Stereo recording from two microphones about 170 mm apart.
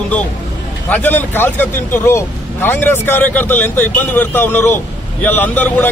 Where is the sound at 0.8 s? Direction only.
10° left (ahead or behind).